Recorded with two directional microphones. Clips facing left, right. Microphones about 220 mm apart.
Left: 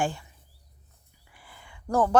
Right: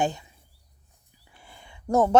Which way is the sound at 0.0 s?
20° right (ahead or behind).